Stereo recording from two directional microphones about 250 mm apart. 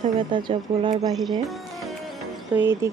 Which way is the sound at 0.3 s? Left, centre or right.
Centre.